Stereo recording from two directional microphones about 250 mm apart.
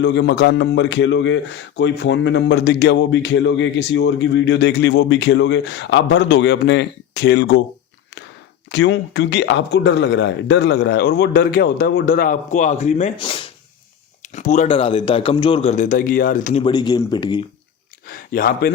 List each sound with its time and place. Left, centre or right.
0.0 s speech: left
8.7 s speech: left; by 17.4 s centre
18.0 s speech: left